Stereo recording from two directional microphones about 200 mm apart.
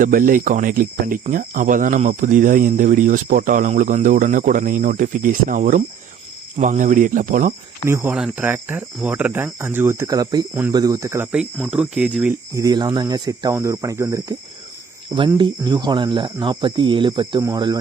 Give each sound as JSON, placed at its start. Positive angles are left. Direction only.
{"t": 0.0, "sound": "speech", "side_deg": -45}
{"t": 7.9, "sound": "speech", "side_deg": -10}
{"t": 12.5, "sound": "speech", "side_deg": -20}
{"t": 15.4, "sound": "speech", "side_deg": -20}